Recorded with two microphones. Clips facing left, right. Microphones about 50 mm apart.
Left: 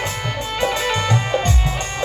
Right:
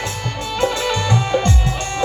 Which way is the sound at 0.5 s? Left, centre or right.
Left.